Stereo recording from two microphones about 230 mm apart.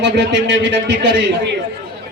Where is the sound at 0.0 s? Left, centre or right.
Right.